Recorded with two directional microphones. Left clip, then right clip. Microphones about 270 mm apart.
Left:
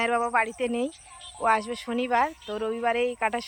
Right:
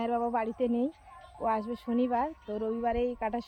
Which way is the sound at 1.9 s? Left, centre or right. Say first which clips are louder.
Right 1 dB; left.